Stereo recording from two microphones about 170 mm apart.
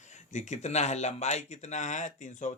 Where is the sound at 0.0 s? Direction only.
45° left (ahead or behind).